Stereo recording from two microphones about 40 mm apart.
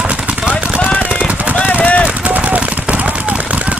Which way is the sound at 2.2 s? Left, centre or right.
Right.